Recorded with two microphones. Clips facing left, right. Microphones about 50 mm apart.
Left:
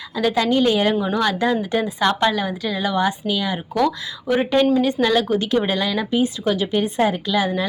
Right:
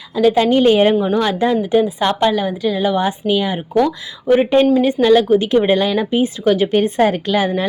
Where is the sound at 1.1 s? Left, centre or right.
Centre; by 6.7 s right.